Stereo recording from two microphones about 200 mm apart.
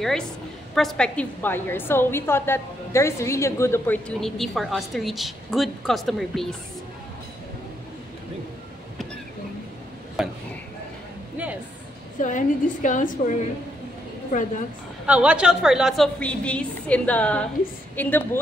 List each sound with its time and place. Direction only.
0.0 s a woman's voice: centre (ahead or behind)
10.2 s a sound: centre (ahead or behind)
12.2 s a woman's voice: 40° left (ahead or behind)
14.3 s a woman's voice: 40° left (ahead or behind)
15.0 s a woman's voice: 5° right (ahead or behind)